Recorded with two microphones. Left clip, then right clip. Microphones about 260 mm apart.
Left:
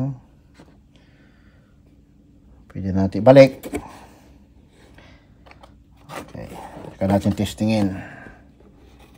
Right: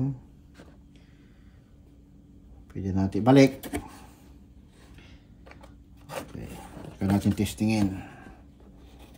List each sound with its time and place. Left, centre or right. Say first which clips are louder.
2.7 s speech: left 6 dB; left
3.4 s speech: left 4 dB; centre
4.9 s a sound: left 5 dB; centre
7.5 s speech: left 6 dB; left